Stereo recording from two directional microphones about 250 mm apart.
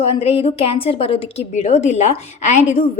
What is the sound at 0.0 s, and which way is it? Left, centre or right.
A woman's voice, left.